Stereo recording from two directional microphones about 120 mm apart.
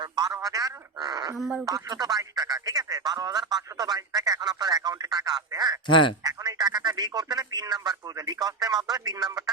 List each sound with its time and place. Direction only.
0.0 s speech: 35° right (ahead or behind)
5.8 s speech: 40° left (ahead or behind)
6.2 s speech: 35° right (ahead or behind)